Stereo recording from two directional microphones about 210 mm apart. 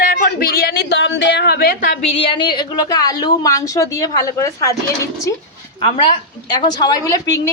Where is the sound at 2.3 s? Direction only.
20° left (ahead or behind).